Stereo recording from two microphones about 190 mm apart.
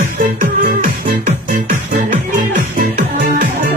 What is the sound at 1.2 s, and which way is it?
Music, 40° right (ahead or behind).